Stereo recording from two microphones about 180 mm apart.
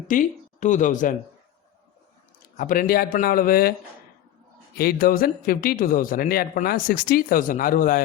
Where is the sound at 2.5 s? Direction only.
50° left (ahead or behind).